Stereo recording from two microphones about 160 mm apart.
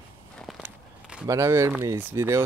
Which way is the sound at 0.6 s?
5° right (ahead or behind).